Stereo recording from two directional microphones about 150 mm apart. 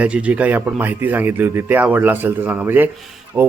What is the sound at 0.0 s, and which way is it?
A man's voice, 10° right (ahead or behind).